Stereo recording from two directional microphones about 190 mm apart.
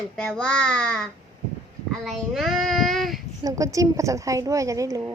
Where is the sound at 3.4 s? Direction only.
15° right (ahead or behind).